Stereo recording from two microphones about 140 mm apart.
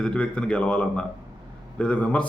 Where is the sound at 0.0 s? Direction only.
5° left (ahead or behind).